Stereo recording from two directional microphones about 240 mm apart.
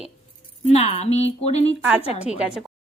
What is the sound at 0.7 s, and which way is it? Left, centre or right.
Speech, left.